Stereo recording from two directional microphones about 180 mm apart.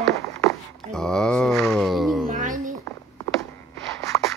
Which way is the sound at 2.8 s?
15° left (ahead or behind).